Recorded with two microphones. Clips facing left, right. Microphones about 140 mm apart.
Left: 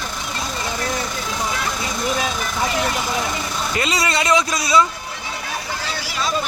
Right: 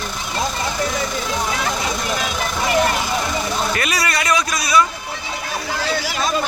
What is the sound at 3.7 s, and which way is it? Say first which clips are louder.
A man's voice: even; 20° left (ahead or behind).